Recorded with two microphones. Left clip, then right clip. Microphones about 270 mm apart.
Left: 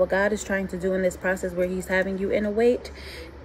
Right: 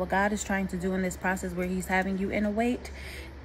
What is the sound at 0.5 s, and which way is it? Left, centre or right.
Speech, centre.